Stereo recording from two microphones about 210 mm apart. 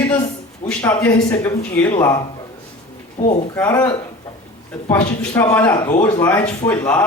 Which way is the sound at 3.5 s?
10° left (ahead or behind).